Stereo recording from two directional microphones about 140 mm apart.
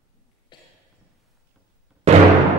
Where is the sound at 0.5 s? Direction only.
35° left (ahead or behind).